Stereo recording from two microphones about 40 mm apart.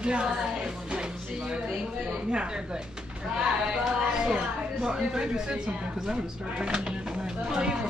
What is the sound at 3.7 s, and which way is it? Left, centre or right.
A woman's voice, centre.